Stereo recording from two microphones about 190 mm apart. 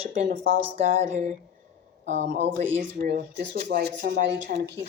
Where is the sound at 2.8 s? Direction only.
70° right (ahead or behind).